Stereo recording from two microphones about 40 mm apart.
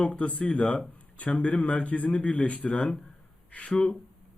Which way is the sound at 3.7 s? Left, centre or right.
Left.